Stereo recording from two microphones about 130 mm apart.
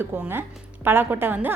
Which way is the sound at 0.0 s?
15° right (ahead or behind).